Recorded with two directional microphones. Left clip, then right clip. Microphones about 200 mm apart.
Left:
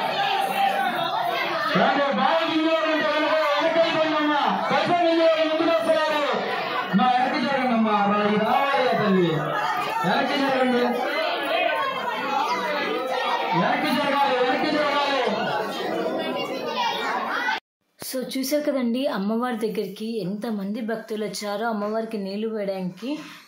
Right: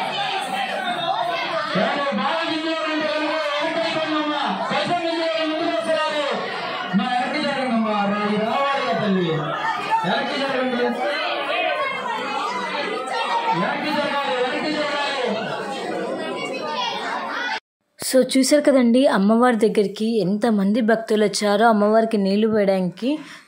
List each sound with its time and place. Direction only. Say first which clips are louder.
18.1 s a woman's voice: right 9 dB; 35° right (ahead or behind)